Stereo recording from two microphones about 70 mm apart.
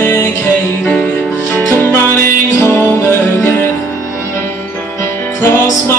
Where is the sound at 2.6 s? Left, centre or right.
Left.